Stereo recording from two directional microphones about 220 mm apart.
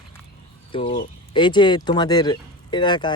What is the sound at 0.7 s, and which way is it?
Speech, 20° left (ahead or behind).